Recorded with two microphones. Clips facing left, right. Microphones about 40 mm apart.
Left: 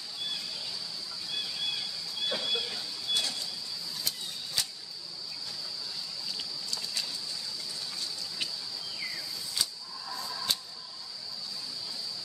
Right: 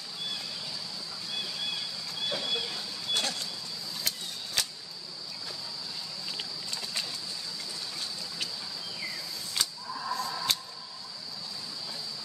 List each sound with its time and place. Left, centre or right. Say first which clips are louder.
2.2 s a sound: even; centre
3.1 s vehicle: right 1 dB; right
4.1 s a sound: right 3 dB; right
4.6 s insect: right 2 dB; right
6.3 s vehicle: right 1 dB; right
9.5 s camera: right 3 dB; right